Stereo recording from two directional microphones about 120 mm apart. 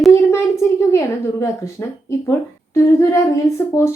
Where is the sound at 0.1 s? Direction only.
25° left (ahead or behind).